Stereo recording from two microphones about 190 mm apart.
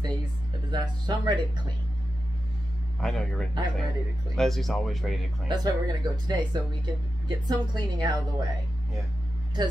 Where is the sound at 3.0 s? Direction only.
5° left (ahead or behind).